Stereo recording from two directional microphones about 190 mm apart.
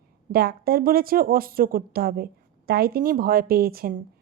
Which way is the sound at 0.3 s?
55° right (ahead or behind).